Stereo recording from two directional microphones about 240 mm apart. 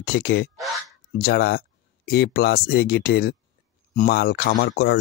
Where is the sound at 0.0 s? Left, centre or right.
Left.